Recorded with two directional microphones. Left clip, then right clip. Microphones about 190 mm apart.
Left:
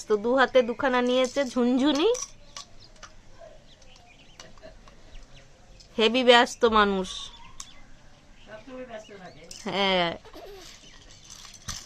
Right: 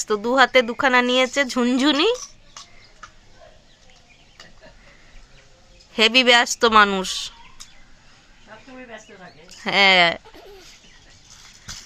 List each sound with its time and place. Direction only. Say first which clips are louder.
0.0 s speech: right 5 dB; 15° right (ahead or behind)
5.9 s speech: right 4 dB; 15° right (ahead or behind)
9.6 s speech: right 10 dB; 15° right (ahead or behind)